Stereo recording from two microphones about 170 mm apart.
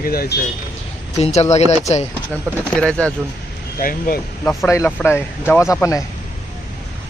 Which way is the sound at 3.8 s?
55° left (ahead or behind).